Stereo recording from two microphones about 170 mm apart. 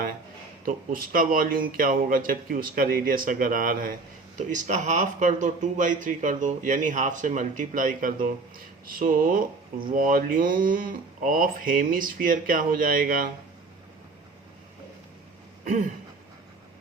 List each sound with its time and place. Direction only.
0.6 s a man's voice: 55° right (ahead or behind)